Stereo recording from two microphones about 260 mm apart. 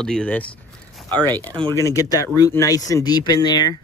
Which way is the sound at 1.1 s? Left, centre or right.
Centre.